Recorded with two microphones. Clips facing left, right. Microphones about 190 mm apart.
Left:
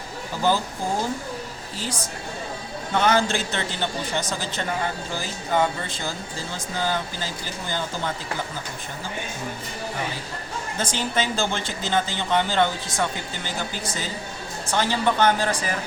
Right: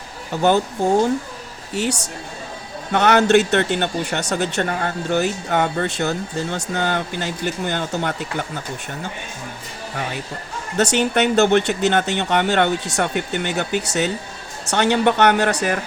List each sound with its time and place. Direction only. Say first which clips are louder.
1.7 s speech: right 9 dB; 70° right (ahead or behind)
10.8 s speech: right 9 dB; 70° right (ahead or behind)